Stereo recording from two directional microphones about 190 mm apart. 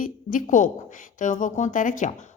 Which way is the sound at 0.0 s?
45° left (ahead or behind).